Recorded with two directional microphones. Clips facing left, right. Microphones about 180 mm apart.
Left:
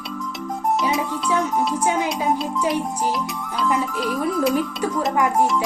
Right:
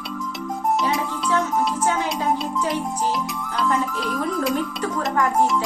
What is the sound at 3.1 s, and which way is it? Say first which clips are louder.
Music: even; centre (ahead or behind).